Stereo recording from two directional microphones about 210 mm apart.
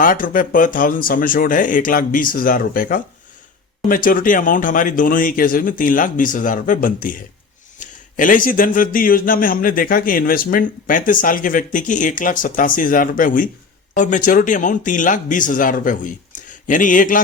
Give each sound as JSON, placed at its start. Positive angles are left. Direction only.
{"t": 0.0, "sound": "speech", "side_deg": 40}